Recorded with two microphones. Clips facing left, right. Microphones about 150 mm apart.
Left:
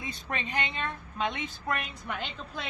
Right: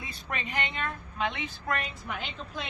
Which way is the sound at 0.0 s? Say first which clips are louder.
Left 1 dB; 25° left (ahead or behind).